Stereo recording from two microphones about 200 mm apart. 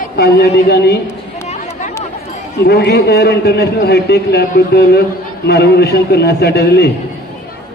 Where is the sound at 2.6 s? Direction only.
55° left (ahead or behind).